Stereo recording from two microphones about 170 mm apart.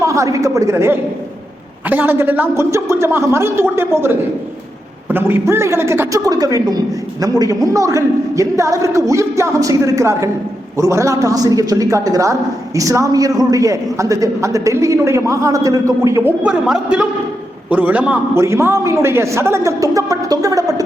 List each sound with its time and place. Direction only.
0.0 s a man's voice: 20° right (ahead or behind)
16.4 s a man's voice: 5° right (ahead or behind); by 20.8 s 20° right (ahead or behind)